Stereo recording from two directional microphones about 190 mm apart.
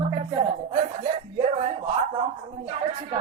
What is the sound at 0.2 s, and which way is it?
Speech, 35° right (ahead or behind).